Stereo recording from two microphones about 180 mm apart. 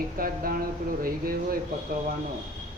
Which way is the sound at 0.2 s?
50° right (ahead or behind).